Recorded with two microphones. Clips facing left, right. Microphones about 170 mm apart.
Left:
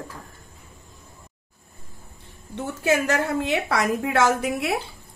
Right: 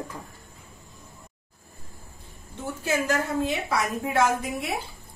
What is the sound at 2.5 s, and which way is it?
A woman's voice, 70° left (ahead or behind).